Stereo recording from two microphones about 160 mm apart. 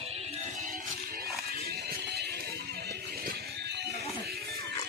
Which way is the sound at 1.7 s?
85° right.